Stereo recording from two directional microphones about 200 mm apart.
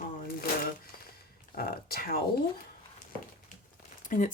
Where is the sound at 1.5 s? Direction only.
45° left (ahead or behind).